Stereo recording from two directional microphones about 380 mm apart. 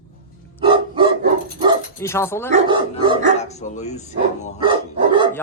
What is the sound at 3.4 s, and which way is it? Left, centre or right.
Speech, centre.